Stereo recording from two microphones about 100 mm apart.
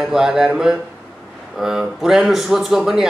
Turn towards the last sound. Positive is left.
turn(degrees=-5)  # may be behind; listen again after turning